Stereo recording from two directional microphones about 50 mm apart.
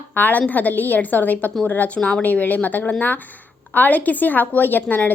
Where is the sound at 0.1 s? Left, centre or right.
Left.